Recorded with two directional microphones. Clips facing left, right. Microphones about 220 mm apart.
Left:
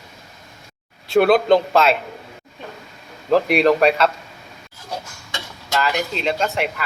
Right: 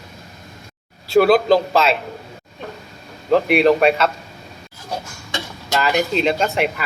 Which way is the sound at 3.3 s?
Centre (ahead or behind).